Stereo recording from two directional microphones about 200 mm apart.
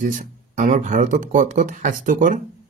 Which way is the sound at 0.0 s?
40° right (ahead or behind).